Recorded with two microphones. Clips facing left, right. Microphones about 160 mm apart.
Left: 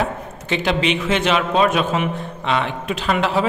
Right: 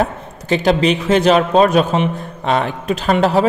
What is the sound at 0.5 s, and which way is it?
A man's voice, 40° right (ahead or behind).